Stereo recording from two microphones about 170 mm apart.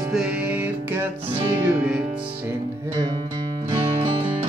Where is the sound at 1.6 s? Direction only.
5° right (ahead or behind).